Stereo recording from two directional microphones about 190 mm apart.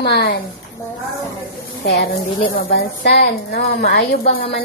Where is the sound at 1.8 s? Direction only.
55° left (ahead or behind).